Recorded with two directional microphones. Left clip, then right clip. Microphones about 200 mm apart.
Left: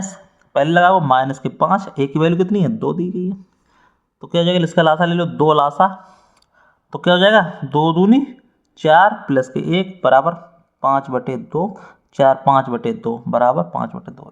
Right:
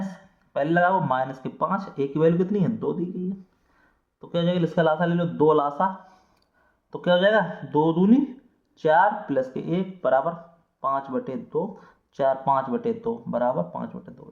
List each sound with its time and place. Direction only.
0.5 s speech: 35° left (ahead or behind)